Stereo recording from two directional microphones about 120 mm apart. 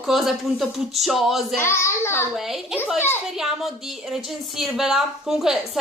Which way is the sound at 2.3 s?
Centre (ahead or behind).